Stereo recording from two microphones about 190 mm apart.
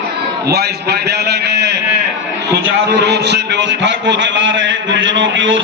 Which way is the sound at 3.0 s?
60° right (ahead or behind).